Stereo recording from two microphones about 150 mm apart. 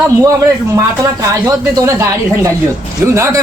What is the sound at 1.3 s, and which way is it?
Speech, 25° right (ahead or behind).